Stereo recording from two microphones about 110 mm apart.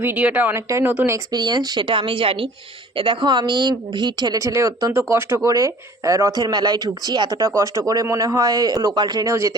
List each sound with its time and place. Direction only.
0.0 s speech: 15° right (ahead or behind)
1.3 s speech: 40° right (ahead or behind)
9.3 s speech: 30° right (ahead or behind)